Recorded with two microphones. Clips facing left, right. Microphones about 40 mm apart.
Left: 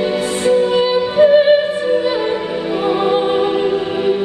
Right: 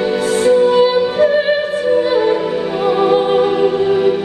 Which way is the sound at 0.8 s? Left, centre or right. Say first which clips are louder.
Right 2 dB; centre.